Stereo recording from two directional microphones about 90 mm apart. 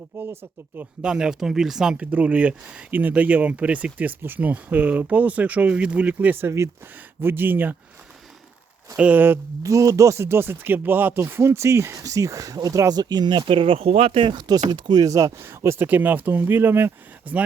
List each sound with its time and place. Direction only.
0.1 s speech: 25° right (ahead or behind)
1.0 s speech: 10° right (ahead or behind)
9.0 s speech: 20° right (ahead or behind)
9.6 s speech: 35° right (ahead or behind); by 14.4 s 65° right (ahead or behind)
14.4 s speech: 50° right (ahead or behind); by 17.4 s 20° right (ahead or behind)